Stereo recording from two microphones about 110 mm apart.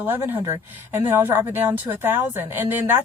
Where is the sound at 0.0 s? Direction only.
20° right (ahead or behind).